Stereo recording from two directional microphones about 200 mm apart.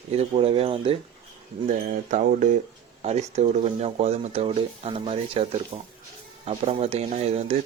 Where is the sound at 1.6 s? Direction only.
40° right (ahead or behind).